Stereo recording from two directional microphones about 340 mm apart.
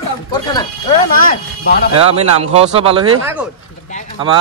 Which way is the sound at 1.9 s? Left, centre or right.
Centre.